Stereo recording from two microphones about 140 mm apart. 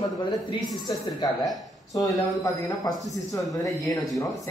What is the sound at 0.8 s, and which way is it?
Speech, 25° left (ahead or behind).